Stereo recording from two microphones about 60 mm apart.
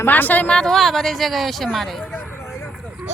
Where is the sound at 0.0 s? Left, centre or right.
Left.